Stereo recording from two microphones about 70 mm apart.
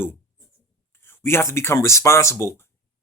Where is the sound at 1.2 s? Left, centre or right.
Left.